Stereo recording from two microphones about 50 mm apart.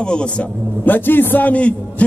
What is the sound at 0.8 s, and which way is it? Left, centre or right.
A man's voice, left.